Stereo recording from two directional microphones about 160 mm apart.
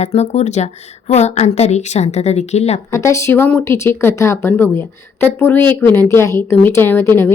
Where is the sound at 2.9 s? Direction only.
20° left (ahead or behind).